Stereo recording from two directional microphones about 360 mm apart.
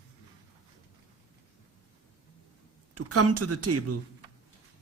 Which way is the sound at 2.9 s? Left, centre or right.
Right.